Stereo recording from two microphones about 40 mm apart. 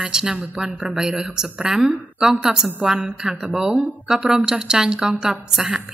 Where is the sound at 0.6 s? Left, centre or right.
Right.